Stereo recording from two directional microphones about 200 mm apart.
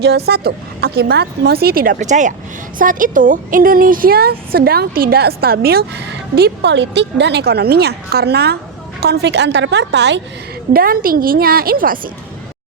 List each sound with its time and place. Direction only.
0.3 s a woman's voice: 50° right (ahead or behind)
10.7 s a woman's voice: 45° right (ahead or behind)